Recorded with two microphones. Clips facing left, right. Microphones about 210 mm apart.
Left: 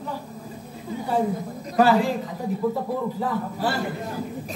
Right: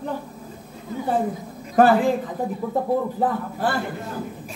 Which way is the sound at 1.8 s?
50° right (ahead or behind).